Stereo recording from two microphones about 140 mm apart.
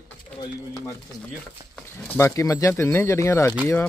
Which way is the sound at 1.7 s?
5° left (ahead or behind).